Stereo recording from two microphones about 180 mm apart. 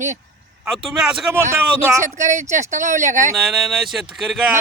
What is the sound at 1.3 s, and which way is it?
Speech, 15° right (ahead or behind).